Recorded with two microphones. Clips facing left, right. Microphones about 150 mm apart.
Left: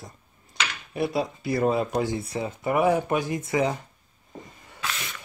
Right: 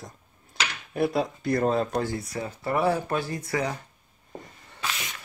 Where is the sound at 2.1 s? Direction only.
25° left (ahead or behind).